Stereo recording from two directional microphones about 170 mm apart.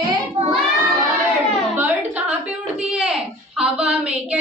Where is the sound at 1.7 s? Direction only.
10° right (ahead or behind).